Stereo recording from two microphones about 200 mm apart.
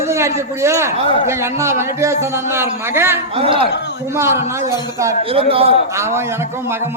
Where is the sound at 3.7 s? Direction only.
60° left (ahead or behind).